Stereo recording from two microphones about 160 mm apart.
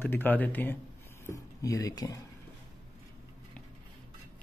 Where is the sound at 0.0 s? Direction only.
10° left (ahead or behind).